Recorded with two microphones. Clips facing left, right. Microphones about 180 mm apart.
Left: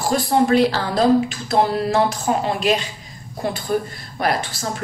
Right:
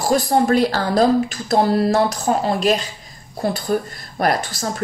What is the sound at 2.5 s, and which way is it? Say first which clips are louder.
Speech: right 1 dB; 40° right (ahead or behind).